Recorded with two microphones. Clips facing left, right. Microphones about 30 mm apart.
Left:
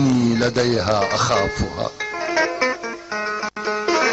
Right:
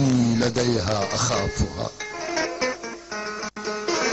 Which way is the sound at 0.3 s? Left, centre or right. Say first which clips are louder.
Left 4 dB; left.